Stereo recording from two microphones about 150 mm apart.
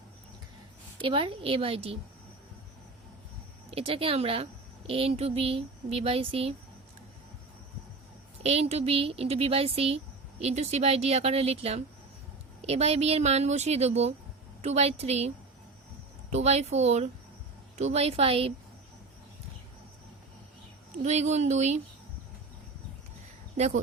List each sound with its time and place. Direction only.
1.0 s speech: 35° right (ahead or behind)
3.7 s speech: 40° right (ahead or behind)
8.4 s speech: 45° right (ahead or behind)
16.3 s speech: 45° right (ahead or behind)
21.0 s speech: 50° right (ahead or behind)
23.6 s speech: 50° right (ahead or behind)